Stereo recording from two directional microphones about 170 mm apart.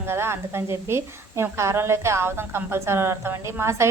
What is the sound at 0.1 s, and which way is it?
A woman's voice, 15° right (ahead or behind).